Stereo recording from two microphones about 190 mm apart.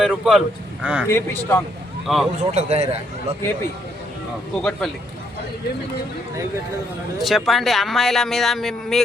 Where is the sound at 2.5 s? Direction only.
35° right (ahead or behind).